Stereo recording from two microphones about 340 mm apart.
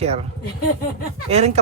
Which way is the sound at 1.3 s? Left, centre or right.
Centre.